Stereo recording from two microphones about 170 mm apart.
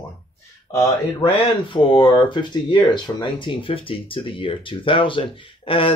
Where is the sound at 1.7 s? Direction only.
30° left (ahead or behind).